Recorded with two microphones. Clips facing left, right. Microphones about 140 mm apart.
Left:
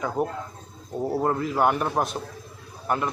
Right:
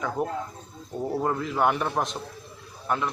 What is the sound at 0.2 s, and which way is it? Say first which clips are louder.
Speech: left 3 dB; 50° left (ahead or behind).